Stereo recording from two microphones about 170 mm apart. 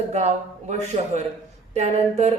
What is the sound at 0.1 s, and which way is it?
Speech, 40° right (ahead or behind).